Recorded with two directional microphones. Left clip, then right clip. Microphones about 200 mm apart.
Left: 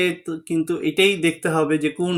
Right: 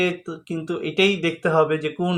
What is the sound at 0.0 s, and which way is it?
Speech, 40° left (ahead or behind).